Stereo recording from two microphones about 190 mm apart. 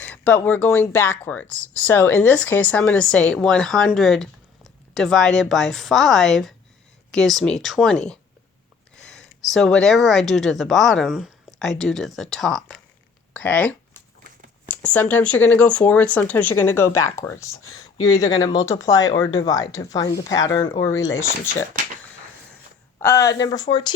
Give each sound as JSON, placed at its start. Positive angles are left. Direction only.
{"t": 0.0, "sound": "a sound", "side_deg": 10}
{"t": 0.4, "sound": "speech", "side_deg": 10}
{"t": 23.0, "sound": "speech", "side_deg": 15}